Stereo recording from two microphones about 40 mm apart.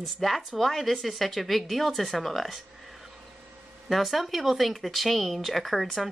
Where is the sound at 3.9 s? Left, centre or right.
Centre.